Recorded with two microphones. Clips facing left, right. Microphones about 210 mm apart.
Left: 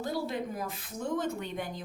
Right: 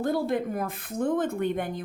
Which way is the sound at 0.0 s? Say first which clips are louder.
Right 7 dB; 55° right (ahead or behind).